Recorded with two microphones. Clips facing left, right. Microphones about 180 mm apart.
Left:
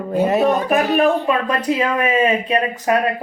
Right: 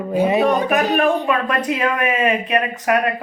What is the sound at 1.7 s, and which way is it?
Speech, 30° left (ahead or behind).